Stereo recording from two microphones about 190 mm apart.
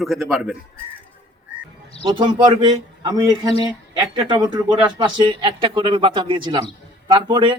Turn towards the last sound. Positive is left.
turn(degrees=-25)  # may be behind; listen again after turning